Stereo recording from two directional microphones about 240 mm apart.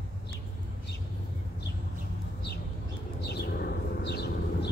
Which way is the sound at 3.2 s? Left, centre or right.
Left.